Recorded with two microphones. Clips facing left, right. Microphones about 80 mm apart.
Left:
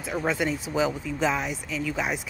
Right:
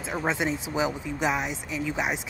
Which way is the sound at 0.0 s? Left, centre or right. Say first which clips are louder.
Left 1 dB; right.